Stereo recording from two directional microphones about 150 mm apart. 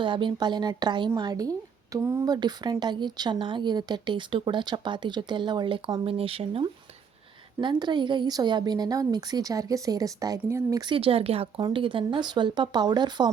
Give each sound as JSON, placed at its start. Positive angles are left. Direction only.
{"t": 0.0, "sound": "a woman's voice", "side_deg": -35}